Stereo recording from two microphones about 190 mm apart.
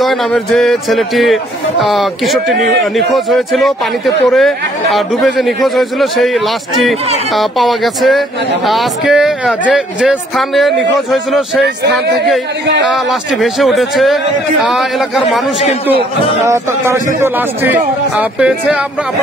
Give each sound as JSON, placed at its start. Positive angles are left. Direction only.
{"t": 0.0, "sound": "a man's voice", "side_deg": 0}
{"t": 11.6, "sound": "speech", "side_deg": -60}
{"t": 12.9, "sound": "a man's voice", "side_deg": 0}
{"t": 16.4, "sound": "a man's voice", "side_deg": -15}